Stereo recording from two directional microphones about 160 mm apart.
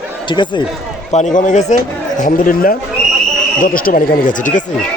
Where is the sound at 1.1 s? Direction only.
50° left (ahead or behind).